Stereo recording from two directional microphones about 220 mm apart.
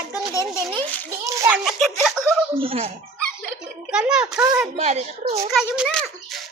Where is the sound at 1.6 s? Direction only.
Centre (ahead or behind).